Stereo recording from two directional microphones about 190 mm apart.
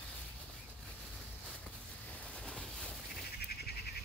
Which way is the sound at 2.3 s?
5° left (ahead or behind).